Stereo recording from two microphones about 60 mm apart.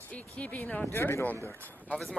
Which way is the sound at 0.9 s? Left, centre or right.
Left.